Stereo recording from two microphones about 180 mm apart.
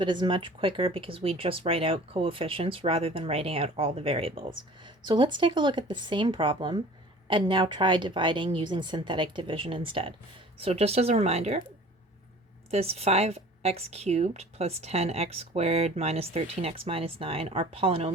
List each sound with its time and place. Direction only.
0.0 s a woman's voice: 25° right (ahead or behind)
12.7 s speech: 35° right (ahead or behind)